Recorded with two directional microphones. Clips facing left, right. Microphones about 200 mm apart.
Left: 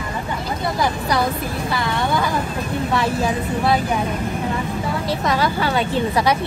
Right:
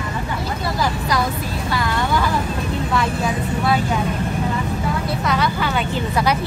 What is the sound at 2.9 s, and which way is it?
Vehicle, 30° left (ahead or behind).